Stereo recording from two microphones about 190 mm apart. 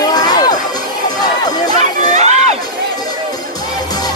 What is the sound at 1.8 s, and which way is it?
Crowd, 35° right (ahead or behind).